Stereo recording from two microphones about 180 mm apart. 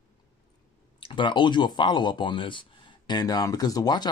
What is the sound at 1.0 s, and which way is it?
Speech, 30° left (ahead or behind).